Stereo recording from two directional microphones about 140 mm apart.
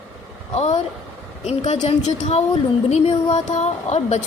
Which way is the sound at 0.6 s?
55° left (ahead or behind).